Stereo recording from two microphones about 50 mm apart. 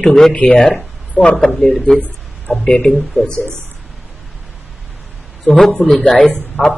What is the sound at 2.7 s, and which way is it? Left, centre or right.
Speech, left.